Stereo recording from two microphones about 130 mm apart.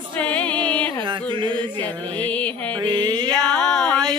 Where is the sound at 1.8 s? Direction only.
10° left (ahead or behind).